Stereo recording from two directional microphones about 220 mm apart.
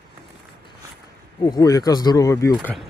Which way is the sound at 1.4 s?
20° left (ahead or behind).